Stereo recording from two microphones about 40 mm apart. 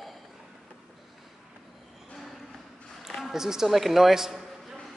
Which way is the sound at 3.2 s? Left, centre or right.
Centre.